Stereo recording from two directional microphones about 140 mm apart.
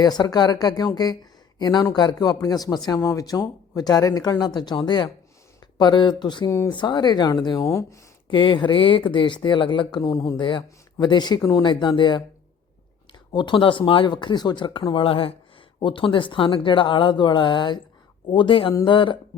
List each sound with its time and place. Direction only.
0.0 s speech: 30° left (ahead or behind)
8.3 s speech: 35° left (ahead or behind)
10.0 s speech: 25° left (ahead or behind)
13.3 s speech: 35° left (ahead or behind)